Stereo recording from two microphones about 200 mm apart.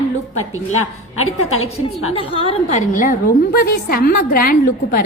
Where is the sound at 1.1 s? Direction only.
90° left.